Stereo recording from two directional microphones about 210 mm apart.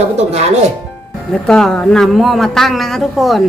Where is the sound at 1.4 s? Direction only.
5° left (ahead or behind).